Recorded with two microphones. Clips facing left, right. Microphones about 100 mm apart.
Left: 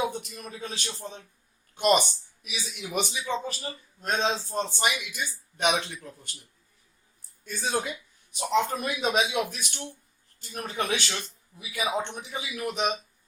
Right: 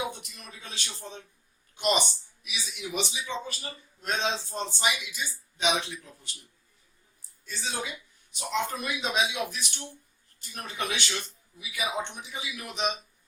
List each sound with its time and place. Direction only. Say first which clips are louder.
0.1 s speech: left 7 dB; 40° left (ahead or behind)
7.4 s speech: left 5 dB; 50° left (ahead or behind)